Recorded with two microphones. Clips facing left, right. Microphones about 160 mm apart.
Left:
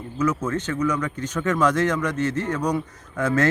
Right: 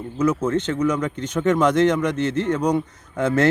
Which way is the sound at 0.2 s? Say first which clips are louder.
Right 3 dB; 25° right (ahead or behind).